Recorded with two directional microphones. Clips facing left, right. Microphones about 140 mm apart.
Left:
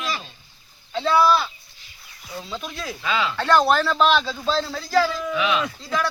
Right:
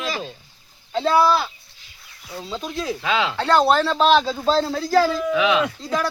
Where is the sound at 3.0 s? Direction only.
75° right (ahead or behind).